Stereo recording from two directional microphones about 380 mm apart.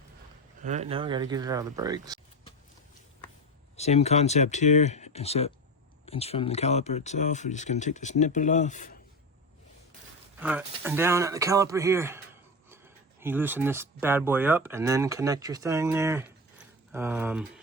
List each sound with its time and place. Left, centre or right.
0.6 s speech: centre
3.8 s speech: centre
10.4 s speech: centre